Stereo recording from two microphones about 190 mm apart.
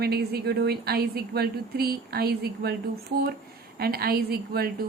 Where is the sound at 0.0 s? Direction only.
55° right (ahead or behind).